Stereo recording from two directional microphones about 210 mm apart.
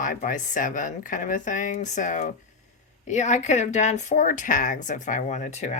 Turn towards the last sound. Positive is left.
turn(degrees=35)  # may be behind; listen again after turning